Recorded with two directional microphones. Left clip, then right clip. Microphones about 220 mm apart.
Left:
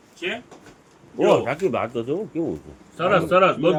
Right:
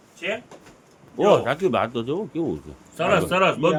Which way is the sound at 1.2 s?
15° right (ahead or behind).